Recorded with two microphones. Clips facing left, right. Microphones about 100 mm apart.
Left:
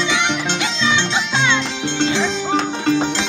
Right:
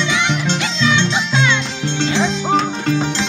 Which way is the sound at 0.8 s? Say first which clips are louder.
Right 3 dB; 25° left (ahead or behind).